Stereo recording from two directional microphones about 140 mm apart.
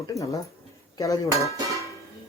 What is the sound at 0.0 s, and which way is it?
Speech, 25° left (ahead or behind).